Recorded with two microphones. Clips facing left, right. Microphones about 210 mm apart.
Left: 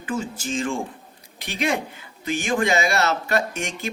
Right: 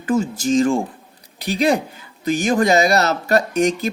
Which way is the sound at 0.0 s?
40° right (ahead or behind).